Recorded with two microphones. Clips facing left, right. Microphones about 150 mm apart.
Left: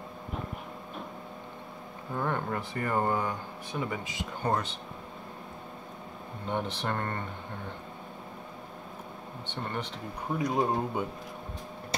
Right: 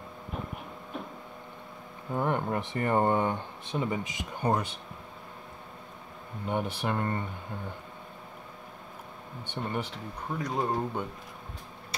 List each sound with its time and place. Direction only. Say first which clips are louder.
2.1 s speech: right 3 dB; 15° right (ahead or behind)
6.5 s speech: right 2 dB; 10° right (ahead or behind)
9.5 s speech: right 2 dB; 10° right (ahead or behind)
10.4 s speech: left 2 dB; 15° left (ahead or behind)